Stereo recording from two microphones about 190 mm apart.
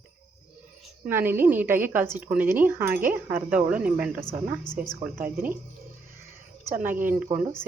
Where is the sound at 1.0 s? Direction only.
10° right (ahead or behind).